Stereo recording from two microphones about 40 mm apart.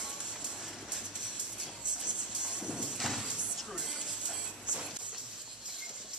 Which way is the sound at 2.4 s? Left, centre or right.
Right.